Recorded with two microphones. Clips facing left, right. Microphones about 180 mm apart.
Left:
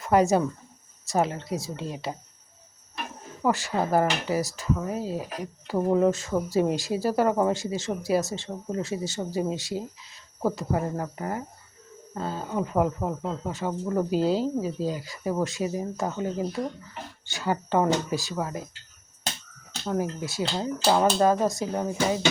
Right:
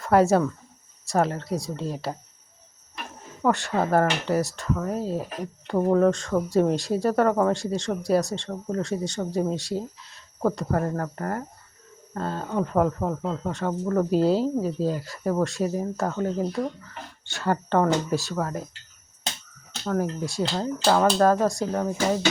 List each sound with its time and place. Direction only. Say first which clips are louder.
0.0 s speech: right 2 dB; centre (ahead or behind)
3.4 s speech: right 2 dB; centre (ahead or behind)
20.0 s speech: right 3 dB; 5° left (ahead or behind)
20.9 s speech: right 2 dB; 15° left (ahead or behind)
21.2 s speech: right 2 dB; centre (ahead or behind)
21.7 s speech: right 2 dB; 15° left (ahead or behind)